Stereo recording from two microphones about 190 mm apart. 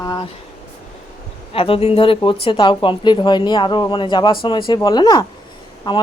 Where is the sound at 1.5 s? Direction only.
30° left (ahead or behind).